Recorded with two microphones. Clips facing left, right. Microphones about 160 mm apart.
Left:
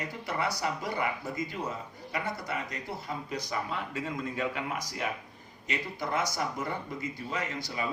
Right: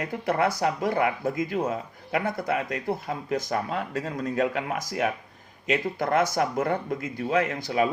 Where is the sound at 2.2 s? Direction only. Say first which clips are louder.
Right 8 dB; 55° right (ahead or behind).